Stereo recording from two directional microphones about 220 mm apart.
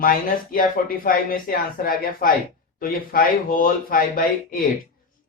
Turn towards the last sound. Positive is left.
turn(degrees=40)  # may be behind; listen again after turning